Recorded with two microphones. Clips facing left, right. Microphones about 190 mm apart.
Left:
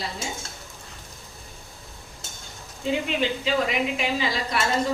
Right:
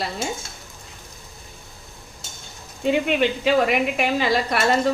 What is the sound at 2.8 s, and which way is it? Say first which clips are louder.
A woman's voice: right 5 dB; 65° right (ahead or behind).